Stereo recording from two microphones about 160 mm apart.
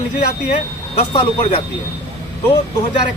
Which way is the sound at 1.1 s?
30° left (ahead or behind).